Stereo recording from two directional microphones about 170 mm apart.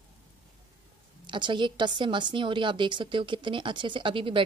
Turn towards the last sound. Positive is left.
turn(degrees=-30)  # may be behind; listen again after turning